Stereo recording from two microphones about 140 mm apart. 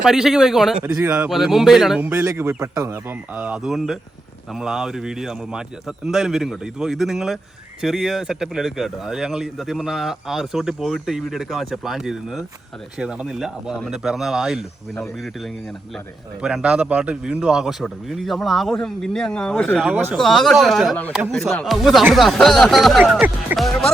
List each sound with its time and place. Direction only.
0.0 s speech: 5° right (ahead or behind); by 3.0 s 20° right (ahead or behind)
3.3 s speech: 10° right (ahead or behind)
16.4 s speech: 5° right (ahead or behind)
19.9 s speech: 15° right (ahead or behind)
20.1 s speech: centre (ahead or behind)